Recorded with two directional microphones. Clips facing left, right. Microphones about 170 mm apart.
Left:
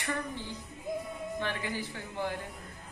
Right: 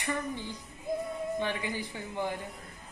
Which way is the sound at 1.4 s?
15° right (ahead or behind).